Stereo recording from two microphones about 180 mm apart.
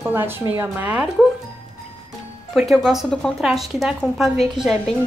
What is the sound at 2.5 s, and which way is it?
A woman's voice, centre (ahead or behind).